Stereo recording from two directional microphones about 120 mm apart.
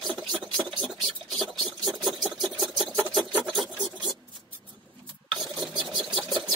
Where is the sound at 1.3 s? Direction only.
35° right (ahead or behind).